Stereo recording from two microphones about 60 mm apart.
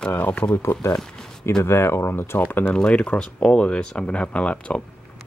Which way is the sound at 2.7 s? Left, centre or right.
Centre.